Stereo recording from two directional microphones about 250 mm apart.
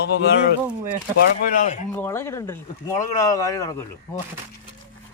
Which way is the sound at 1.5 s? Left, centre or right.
Left.